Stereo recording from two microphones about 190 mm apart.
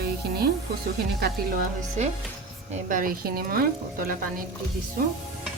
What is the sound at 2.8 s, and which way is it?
Speech, 45° right (ahead or behind).